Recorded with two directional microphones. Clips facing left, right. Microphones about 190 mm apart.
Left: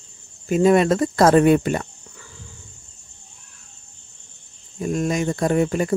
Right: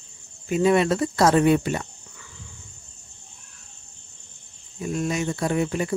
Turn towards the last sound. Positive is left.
turn(degrees=45)  # may be behind; listen again after turning